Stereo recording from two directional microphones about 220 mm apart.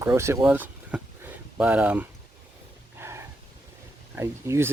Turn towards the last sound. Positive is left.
turn(degrees=-10)  # may be behind; listen again after turning